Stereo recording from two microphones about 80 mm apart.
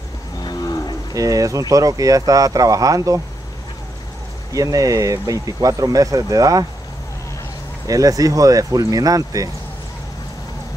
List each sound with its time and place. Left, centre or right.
0.4 s cattle: left
1.1 s speech: right
4.5 s speech: right
7.8 s speech: right